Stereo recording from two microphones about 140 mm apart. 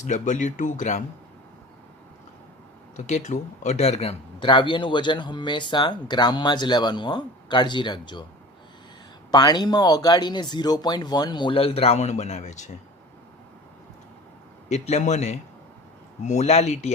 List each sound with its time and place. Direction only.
0.0 s speech: 60° left (ahead or behind)
2.9 s speech: 55° left (ahead or behind); by 8.2 s 35° left (ahead or behind)
9.3 s speech: 30° left (ahead or behind); by 12.7 s 55° left (ahead or behind)
14.7 s speech: 55° left (ahead or behind)